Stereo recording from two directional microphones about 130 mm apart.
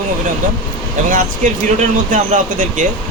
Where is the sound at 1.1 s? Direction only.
75° right (ahead or behind).